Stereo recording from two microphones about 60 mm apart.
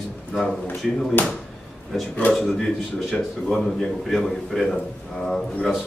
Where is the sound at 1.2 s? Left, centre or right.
Left.